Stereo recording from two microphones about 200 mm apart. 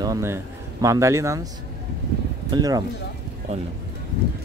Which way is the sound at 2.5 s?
20° right (ahead or behind).